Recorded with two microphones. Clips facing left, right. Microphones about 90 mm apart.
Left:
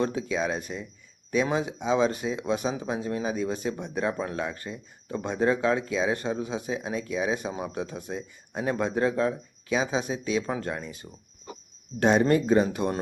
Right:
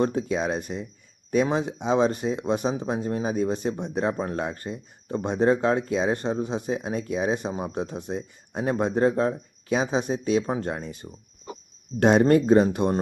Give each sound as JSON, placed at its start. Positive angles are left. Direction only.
{"t": 0.0, "sound": "speech", "side_deg": -50}
{"t": 3.8, "sound": "speech", "side_deg": -25}
{"t": 4.2, "sound": "speech", "side_deg": -40}
{"t": 5.5, "sound": "speech", "side_deg": -45}
{"t": 6.5, "sound": "speech", "side_deg": -50}
{"t": 9.6, "sound": "speech", "side_deg": -50}
{"t": 10.4, "sound": "speech", "side_deg": -30}
{"t": 11.9, "sound": "speech", "side_deg": -45}